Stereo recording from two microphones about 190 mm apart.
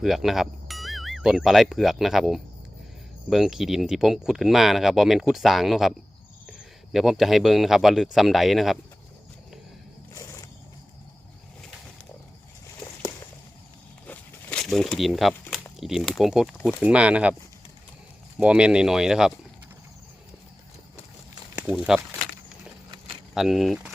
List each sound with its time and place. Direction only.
0.0 s speech: centre (ahead or behind)
6.9 s speech: centre (ahead or behind)
10.2 s a sound: 15° left (ahead or behind)
14.1 s a sound: 5° left (ahead or behind)
15.8 s speech: centre (ahead or behind)
18.3 s speech: 5° right (ahead or behind)
21.7 s speech: 5° right (ahead or behind)
23.3 s speech: centre (ahead or behind)